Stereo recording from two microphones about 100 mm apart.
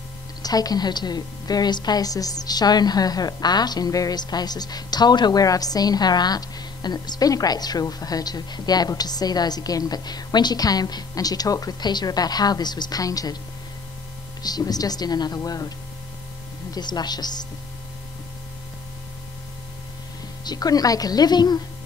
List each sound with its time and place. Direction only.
0.4 s a woman's voice: 40° left (ahead or behind)
14.4 s a woman's voice: 40° left (ahead or behind)
16.7 s speech: 45° left (ahead or behind)
20.4 s a woman's voice: 40° left (ahead or behind)